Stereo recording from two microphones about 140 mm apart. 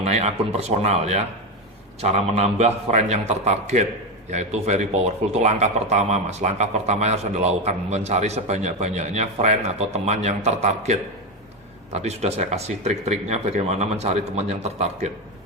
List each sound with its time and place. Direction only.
0.0 s speech: 50° right (ahead or behind)